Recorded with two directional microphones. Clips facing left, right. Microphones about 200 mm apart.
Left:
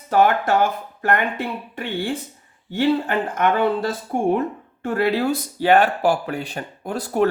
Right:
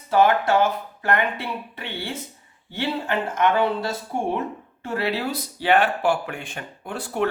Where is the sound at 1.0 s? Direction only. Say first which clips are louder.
Left 2 dB; 45° left (ahead or behind).